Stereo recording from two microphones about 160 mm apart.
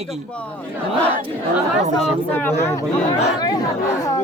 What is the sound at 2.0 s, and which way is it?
Speech, 10° left (ahead or behind).